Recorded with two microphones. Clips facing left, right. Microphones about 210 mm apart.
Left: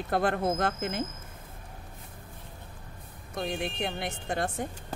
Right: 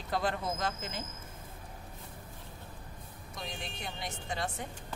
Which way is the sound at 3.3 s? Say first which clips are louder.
Left 11 dB; 60° left (ahead or behind).